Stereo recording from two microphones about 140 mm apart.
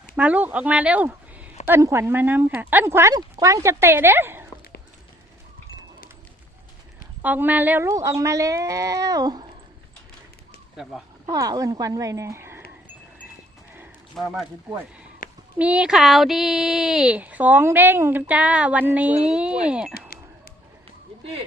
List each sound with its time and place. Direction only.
0.2 s speech: 10° right (ahead or behind)
7.2 s speech: 10° right (ahead or behind); by 9.5 s 30° right (ahead or behind)
11.3 s speech: 25° right (ahead or behind)
14.2 s speech: centre (ahead or behind)
15.2 s a sound: 80° left
15.5 s speech: 10° right (ahead or behind)
20.1 s a sound: 90° left